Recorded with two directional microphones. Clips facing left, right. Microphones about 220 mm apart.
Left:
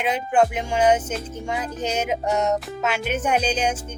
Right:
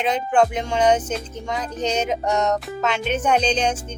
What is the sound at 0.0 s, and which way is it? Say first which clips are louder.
Speech: right 1 dB; 10° left (ahead or behind).